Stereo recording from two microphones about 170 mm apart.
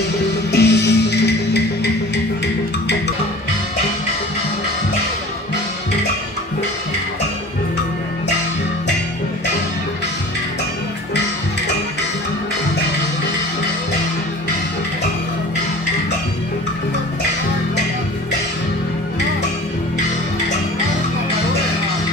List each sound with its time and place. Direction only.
0.5 s music: 80° left